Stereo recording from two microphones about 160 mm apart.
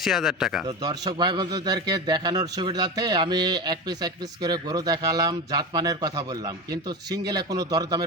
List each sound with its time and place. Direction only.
0.0 s speech: centre (ahead or behind)
0.8 s a man's voice: 25° right (ahead or behind)